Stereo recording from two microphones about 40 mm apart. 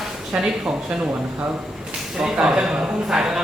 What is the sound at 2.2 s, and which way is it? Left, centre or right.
Speech, centre.